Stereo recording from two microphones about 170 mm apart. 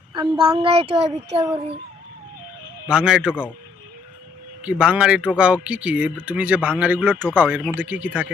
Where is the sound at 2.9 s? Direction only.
5° right (ahead or behind).